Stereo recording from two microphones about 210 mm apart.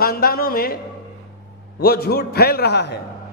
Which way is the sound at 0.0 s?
45° left (ahead or behind).